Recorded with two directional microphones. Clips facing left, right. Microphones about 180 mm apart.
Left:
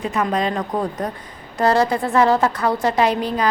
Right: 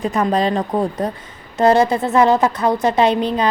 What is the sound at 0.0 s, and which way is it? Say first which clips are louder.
A woman's voice: right 3 dB; 35° right (ahead or behind).